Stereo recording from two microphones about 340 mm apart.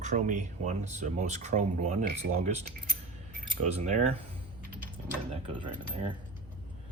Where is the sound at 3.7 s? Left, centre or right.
Centre.